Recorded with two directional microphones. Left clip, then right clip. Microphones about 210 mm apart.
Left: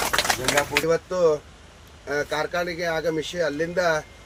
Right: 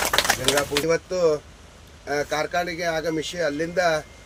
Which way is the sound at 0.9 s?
15° right (ahead or behind).